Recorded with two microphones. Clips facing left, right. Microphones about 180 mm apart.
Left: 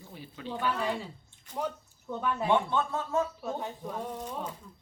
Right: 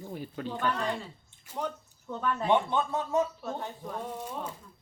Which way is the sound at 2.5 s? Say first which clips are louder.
Right 1 dB; 15° right (ahead or behind).